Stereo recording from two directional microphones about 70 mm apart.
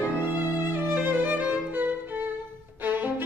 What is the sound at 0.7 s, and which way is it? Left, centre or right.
Music, right.